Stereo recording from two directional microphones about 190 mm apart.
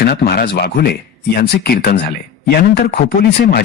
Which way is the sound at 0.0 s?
55° left (ahead or behind).